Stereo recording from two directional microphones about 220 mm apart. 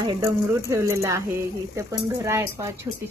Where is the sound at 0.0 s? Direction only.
15° right (ahead or behind).